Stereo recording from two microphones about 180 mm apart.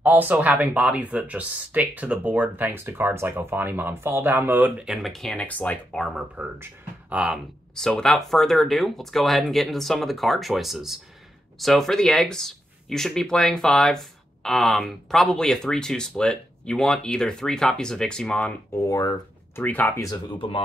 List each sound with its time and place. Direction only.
0.0 s speech: 10° right (ahead or behind)
6.3 s speech: 10° right (ahead or behind)
7.7 s speech: 5° left (ahead or behind)
18.9 s speech: 20° left (ahead or behind)
20.3 s speech: 30° left (ahead or behind)